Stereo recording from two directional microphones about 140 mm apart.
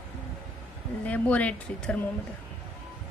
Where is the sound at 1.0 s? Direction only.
10° left (ahead or behind).